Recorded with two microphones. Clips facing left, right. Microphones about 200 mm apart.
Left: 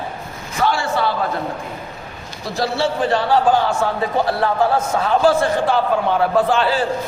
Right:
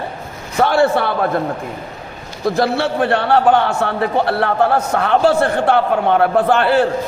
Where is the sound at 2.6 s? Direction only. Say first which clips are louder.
Right 1 dB; 60° right (ahead or behind).